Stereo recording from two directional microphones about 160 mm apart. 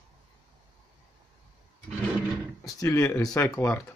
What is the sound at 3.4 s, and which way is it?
Speech, 10° left (ahead or behind).